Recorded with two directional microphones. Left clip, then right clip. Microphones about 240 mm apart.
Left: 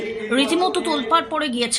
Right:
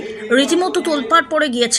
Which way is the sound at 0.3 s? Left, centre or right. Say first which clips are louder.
Right 4 dB; centre.